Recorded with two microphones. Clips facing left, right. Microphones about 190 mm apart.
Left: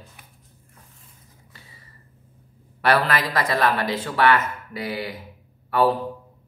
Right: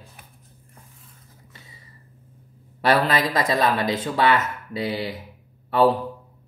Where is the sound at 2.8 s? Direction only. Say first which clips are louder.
Right 1 dB; 20° right (ahead or behind).